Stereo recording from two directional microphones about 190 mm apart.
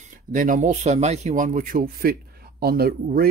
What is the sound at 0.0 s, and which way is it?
Speech, 45° right (ahead or behind).